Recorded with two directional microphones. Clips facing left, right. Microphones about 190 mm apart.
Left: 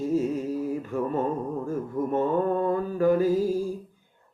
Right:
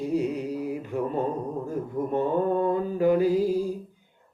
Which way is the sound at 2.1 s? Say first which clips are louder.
Even; 15° right (ahead or behind).